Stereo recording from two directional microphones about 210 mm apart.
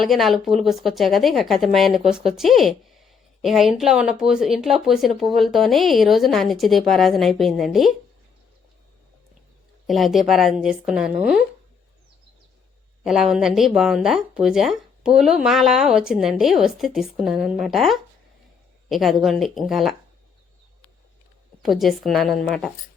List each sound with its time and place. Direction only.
0.0 s speech: centre (ahead or behind)
9.8 s speech: centre (ahead or behind)
13.1 s speech: centre (ahead or behind)
21.6 s speech: centre (ahead or behind)